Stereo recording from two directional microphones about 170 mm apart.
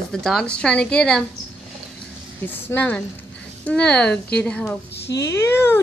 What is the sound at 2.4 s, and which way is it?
Speech, 10° left (ahead or behind).